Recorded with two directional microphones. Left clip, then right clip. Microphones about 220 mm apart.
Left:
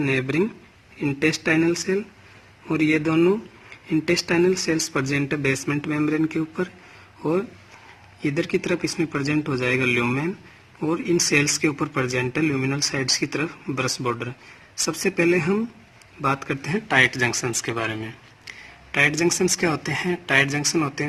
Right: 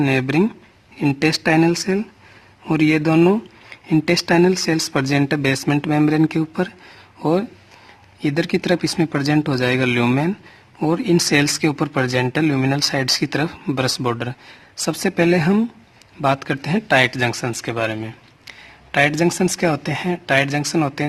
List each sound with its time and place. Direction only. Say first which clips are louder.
0.0 s speech: right 4 dB; 55° right (ahead or behind)
8.2 s speech: right 3 dB; 55° right (ahead or behind)
16.3 s speech: right 4 dB; 45° right (ahead or behind)